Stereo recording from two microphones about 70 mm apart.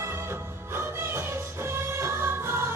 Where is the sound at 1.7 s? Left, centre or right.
Right.